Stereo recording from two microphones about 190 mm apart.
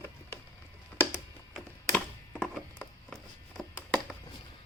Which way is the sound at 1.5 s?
Centre (ahead or behind).